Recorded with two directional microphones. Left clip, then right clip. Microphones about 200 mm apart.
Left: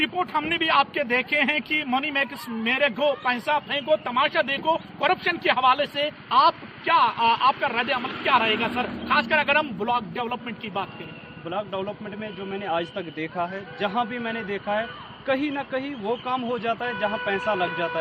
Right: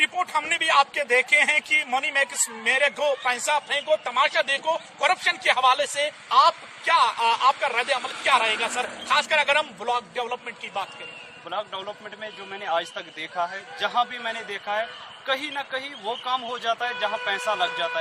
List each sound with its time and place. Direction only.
0.0 s speech: 20° right (ahead or behind)
11.4 s a man's voice: centre (ahead or behind)